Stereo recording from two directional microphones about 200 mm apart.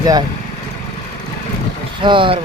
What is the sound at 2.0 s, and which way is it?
Speech, 25° right (ahead or behind).